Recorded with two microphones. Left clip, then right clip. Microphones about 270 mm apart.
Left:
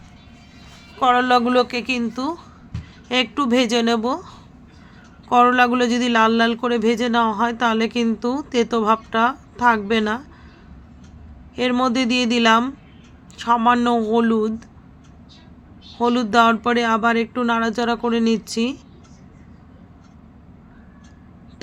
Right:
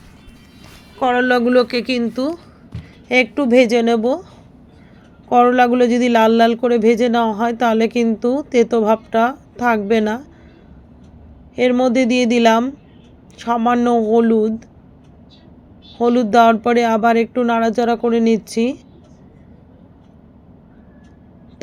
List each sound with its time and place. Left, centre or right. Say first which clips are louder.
0.9 s speech: even; centre
11.5 s speech: right 5 dB; centre
16.0 s speech: right 4 dB; centre